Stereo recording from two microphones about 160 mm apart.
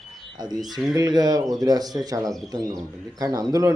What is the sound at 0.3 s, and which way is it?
Speech, 25° right (ahead or behind).